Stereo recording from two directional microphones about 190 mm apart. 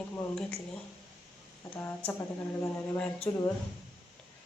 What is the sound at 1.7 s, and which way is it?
Speech, 10° left (ahead or behind).